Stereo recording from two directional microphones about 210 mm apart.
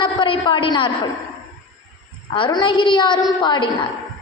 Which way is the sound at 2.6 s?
20° left (ahead or behind).